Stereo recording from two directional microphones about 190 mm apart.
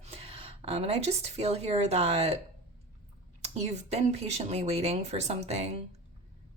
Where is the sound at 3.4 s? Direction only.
35° right (ahead or behind).